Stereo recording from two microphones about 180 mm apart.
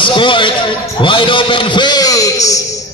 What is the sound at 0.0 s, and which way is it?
A man's voice, 25° left (ahead or behind).